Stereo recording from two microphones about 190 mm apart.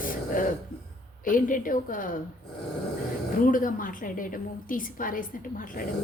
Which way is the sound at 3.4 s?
45° left (ahead or behind).